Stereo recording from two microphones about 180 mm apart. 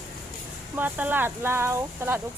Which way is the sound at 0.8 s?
10° right (ahead or behind).